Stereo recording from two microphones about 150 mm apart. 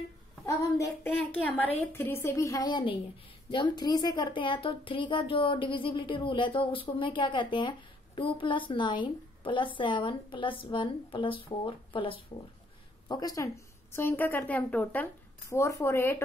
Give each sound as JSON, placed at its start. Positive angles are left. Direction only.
{"t": 0.5, "sound": "child singing", "side_deg": 20}
{"t": 1.0, "sound": "a woman's voice", "side_deg": 10}
{"t": 13.1, "sound": "child singing", "side_deg": 25}
{"t": 13.9, "sound": "a woman's voice", "side_deg": 15}